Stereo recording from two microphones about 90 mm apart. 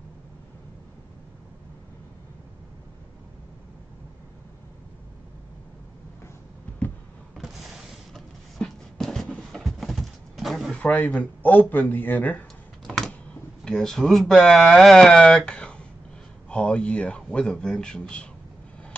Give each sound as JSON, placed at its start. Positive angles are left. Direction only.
{"t": 7.3, "sound": "a sound", "side_deg": 0}
{"t": 10.7, "sound": "speech", "side_deg": 15}
{"t": 12.8, "sound": "computer keyboard", "side_deg": 0}
{"t": 13.7, "sound": "speech", "side_deg": 5}